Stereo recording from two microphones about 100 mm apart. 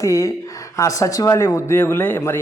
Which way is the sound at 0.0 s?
30° left (ahead or behind).